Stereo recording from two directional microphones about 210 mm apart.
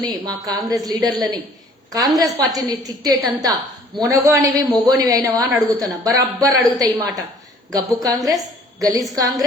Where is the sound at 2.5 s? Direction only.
15° right (ahead or behind).